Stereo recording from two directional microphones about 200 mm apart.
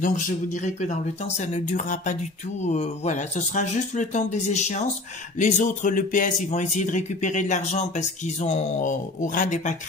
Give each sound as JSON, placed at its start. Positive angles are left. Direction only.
{"t": 0.0, "sound": "speech", "side_deg": 40}